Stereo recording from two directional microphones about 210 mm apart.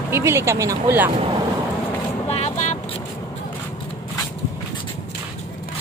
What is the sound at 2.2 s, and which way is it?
Vehicle, 30° left (ahead or behind).